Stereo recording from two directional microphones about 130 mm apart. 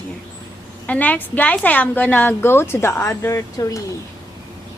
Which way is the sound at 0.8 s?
10° left (ahead or behind).